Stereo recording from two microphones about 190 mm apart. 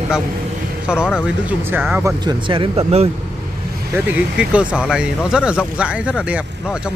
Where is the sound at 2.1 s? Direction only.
25° right (ahead or behind).